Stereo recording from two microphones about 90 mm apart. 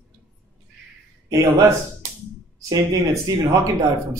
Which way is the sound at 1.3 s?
30° right (ahead or behind).